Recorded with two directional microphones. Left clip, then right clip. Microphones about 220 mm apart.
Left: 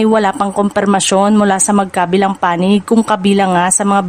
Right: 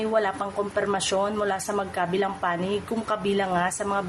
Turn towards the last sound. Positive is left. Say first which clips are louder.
# left 13 dB
turn(degrees=50)  # may be behind; listen again after turning